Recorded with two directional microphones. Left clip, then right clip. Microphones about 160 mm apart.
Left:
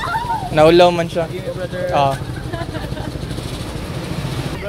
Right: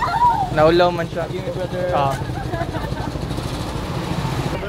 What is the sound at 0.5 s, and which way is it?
Speech, 90° left.